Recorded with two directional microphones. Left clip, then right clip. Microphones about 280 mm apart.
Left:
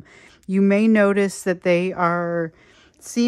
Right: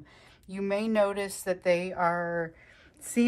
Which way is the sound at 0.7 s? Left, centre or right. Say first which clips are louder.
Left 8 dB; left.